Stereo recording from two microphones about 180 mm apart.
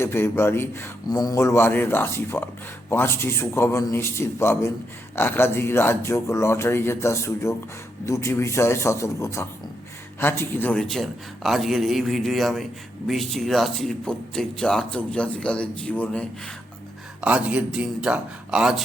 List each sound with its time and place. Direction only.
0.0 s a man's voice: 15° left (ahead or behind)
17.2 s speech: 5° right (ahead or behind)